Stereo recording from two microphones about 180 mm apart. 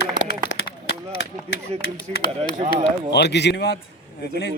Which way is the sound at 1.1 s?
60° left (ahead or behind).